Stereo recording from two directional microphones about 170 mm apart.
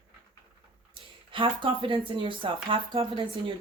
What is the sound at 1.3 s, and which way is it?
Speech, 30° right (ahead or behind).